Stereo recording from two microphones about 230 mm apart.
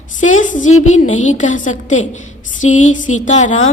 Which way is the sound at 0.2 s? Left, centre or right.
Left.